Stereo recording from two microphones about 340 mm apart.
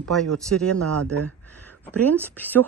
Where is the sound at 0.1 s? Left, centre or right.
Centre.